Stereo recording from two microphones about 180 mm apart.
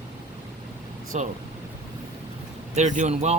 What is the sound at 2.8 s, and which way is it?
Speech, 40° right (ahead or behind).